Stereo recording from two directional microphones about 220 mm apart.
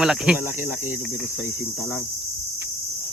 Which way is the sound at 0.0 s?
Centre (ahead or behind).